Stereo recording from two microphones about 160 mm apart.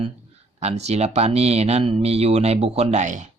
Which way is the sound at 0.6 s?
40° right (ahead or behind).